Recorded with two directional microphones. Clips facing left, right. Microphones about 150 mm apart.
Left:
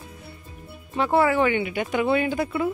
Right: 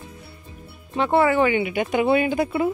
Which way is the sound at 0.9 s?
Centre (ahead or behind).